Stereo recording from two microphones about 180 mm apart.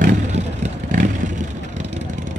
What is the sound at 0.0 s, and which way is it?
Vehicle, 40° right (ahead or behind).